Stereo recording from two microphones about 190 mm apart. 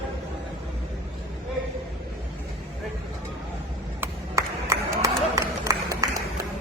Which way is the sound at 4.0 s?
15° right (ahead or behind).